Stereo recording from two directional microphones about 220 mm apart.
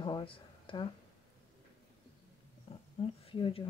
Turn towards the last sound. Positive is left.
turn(degrees=25)  # may be behind; listen again after turning